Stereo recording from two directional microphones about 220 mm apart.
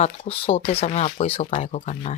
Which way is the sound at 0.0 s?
25° left (ahead or behind).